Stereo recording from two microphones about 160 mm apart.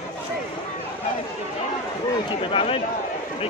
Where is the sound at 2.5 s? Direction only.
35° left (ahead or behind).